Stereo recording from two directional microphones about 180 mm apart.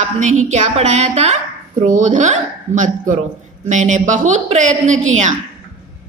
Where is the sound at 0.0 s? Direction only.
45° right (ahead or behind).